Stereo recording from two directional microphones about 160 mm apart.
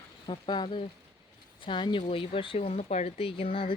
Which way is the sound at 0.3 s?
30° left (ahead or behind).